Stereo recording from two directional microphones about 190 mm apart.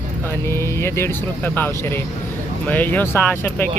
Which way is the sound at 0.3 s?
15° left (ahead or behind).